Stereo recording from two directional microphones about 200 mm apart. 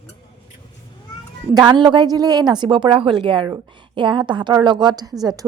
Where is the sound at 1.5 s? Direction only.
20° right (ahead or behind).